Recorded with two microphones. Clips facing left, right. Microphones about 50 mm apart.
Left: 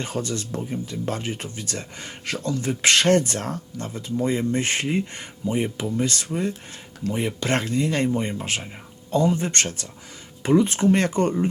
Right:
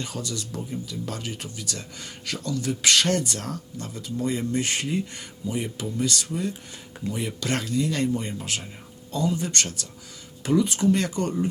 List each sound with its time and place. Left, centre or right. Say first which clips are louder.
0.0 s speech: left 5 dB; left